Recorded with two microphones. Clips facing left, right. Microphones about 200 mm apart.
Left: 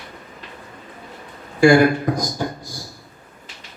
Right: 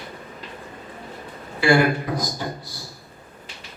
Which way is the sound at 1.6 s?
45° left (ahead or behind).